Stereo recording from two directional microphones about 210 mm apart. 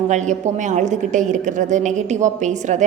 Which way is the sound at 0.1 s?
35° right (ahead or behind).